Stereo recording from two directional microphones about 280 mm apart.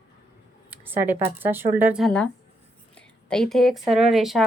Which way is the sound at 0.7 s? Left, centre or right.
Centre.